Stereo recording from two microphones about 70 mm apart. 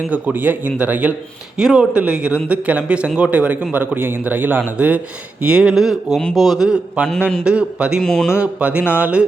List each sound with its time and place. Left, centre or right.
0.1 s a man's voice: right
1.5 s a man's voice: centre
7.0 s speech: centre
8.0 s speech: centre
8.4 s a man's voice: centre